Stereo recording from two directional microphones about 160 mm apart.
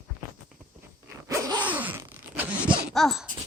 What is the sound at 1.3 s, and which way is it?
Zipper, 25° right (ahead or behind).